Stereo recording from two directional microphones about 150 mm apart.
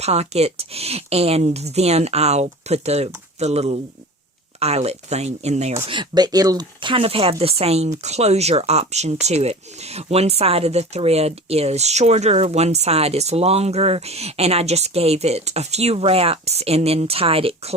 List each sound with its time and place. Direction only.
0.0 s speech: 45° right (ahead or behind)